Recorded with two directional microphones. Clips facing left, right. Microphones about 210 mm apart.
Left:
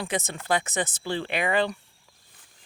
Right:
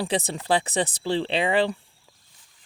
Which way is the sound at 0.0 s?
35° right (ahead or behind).